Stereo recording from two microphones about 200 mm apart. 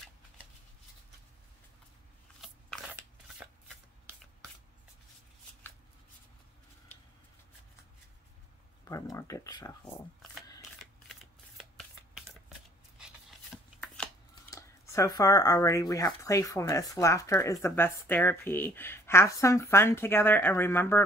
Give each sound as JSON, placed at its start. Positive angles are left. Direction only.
{"t": 2.4, "sound": "shuffling cards", "side_deg": -5}
{"t": 9.1, "sound": "speech", "side_deg": 15}
{"t": 10.8, "sound": "shuffling cards", "side_deg": 0}
{"t": 12.1, "sound": "a sound", "side_deg": -5}
{"t": 14.5, "sound": "speech", "side_deg": 15}